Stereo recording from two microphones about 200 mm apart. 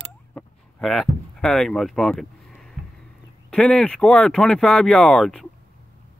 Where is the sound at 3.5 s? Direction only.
5° left (ahead or behind).